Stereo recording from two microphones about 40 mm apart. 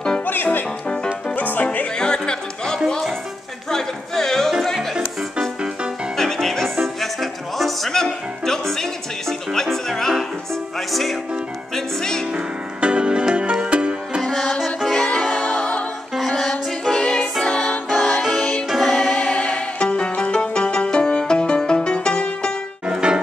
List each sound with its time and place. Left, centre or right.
0.3 s music: left
2.0 s music: centre
6.1 s music: centre
11.7 s music: centre
12.8 s music: right
14.2 s music: centre
15.3 s music: left
16.3 s music: centre
17.0 s music: left; by 19.1 s centre
19.1 s music: left
22.8 s music: right